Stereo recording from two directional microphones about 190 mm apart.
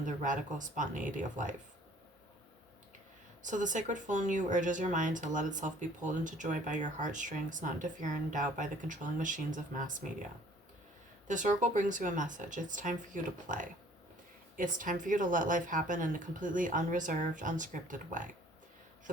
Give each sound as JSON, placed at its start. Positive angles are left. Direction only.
{"t": 0.0, "sound": "speech", "side_deg": -40}
{"t": 3.4, "sound": "speech", "side_deg": -40}
{"t": 11.3, "sound": "speech", "side_deg": -40}
{"t": 14.5, "sound": "speech", "side_deg": -45}